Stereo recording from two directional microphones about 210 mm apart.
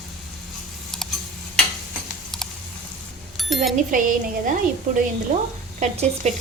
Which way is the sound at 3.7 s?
40° right (ahead or behind).